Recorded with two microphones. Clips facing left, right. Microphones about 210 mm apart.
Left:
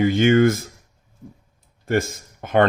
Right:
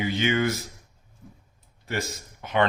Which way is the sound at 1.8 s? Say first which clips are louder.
Left 9 dB; 50° left (ahead or behind).